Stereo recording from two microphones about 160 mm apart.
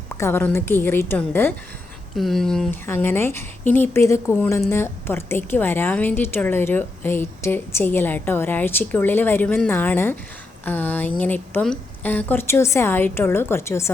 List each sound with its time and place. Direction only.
0.2 s a woman's voice: 15° left (ahead or behind)
2.1 s speech: centre (ahead or behind)
2.8 s a woman's voice: 15° left (ahead or behind)